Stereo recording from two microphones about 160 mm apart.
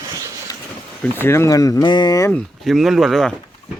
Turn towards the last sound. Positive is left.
turn(degrees=0)  # may be behind; listen again after turning